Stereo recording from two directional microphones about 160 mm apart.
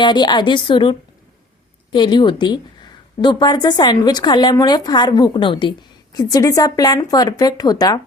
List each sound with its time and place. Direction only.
0.0 s a woman's voice: 25° left (ahead or behind)